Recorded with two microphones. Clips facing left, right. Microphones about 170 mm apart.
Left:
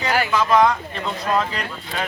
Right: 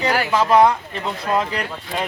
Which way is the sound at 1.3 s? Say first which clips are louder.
Right 2 dB; 15° right (ahead or behind).